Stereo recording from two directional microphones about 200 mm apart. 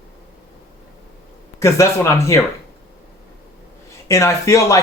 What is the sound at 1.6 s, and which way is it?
Speech, 15° left (ahead or behind).